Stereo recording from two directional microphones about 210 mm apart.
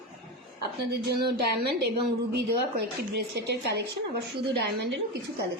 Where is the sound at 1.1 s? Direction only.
50° right (ahead or behind).